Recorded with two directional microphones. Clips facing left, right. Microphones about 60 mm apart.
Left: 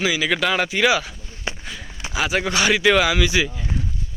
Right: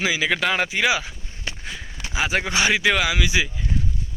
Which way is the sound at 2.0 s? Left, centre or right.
Centre.